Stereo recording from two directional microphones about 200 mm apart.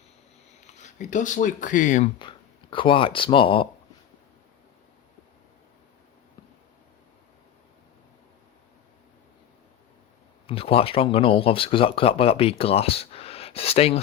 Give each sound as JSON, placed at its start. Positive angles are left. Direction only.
{"t": 0.7, "sound": "speech", "side_deg": 35}
{"t": 2.1, "sound": "speech", "side_deg": 25}
{"t": 10.4, "sound": "speech", "side_deg": 30}